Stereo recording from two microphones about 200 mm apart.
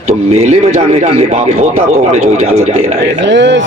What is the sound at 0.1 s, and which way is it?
A man's voice, 30° right (ahead or behind).